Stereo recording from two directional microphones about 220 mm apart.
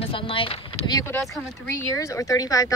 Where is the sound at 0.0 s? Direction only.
25° left (ahead or behind).